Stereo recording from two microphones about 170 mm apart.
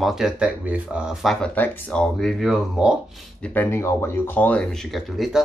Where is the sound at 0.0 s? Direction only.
5° right (ahead or behind).